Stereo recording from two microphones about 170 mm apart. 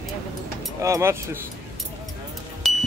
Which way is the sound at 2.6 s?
Centre (ahead or behind).